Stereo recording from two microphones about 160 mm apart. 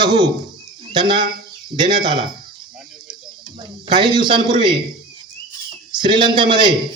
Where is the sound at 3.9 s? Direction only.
30° right (ahead or behind).